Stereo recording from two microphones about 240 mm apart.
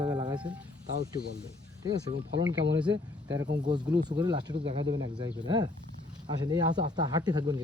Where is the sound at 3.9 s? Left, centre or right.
Centre.